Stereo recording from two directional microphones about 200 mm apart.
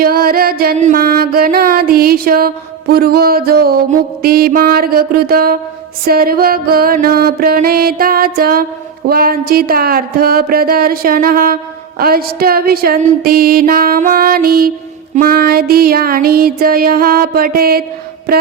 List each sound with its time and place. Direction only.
0.0 s music: 50° right (ahead or behind)